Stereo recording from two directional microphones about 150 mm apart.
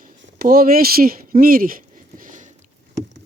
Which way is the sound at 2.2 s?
60° right (ahead or behind).